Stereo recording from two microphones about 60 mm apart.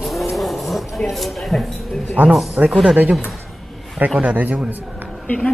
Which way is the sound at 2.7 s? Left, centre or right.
Centre.